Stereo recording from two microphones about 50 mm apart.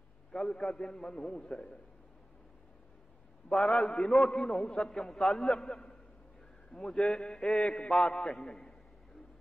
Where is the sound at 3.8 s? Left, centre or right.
Centre.